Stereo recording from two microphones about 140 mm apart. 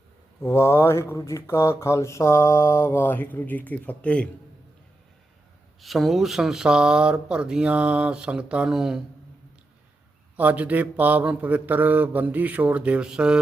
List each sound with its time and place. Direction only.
0.4 s speech: 20° left (ahead or behind)
5.8 s speech: centre (ahead or behind)
10.3 s speech: 10° right (ahead or behind)